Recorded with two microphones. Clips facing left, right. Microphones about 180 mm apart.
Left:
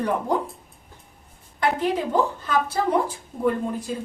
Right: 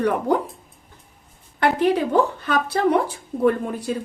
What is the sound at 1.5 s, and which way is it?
A woman's voice, 70° right (ahead or behind).